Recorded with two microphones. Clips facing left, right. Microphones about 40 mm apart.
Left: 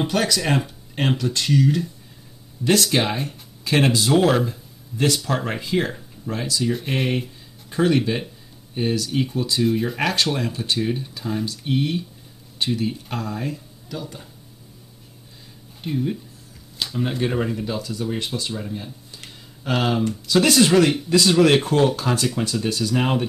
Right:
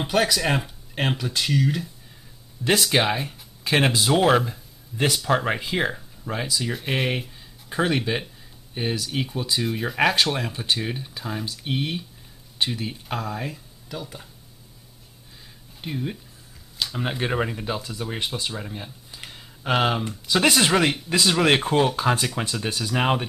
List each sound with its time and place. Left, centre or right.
0.0 s speech: centre
15.8 s speech: centre